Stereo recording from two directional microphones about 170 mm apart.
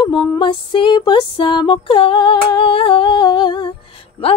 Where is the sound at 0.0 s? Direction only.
30° left (ahead or behind).